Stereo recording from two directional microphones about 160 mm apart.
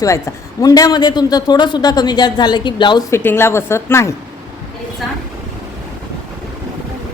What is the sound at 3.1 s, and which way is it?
A woman's voice, 15° left (ahead or behind).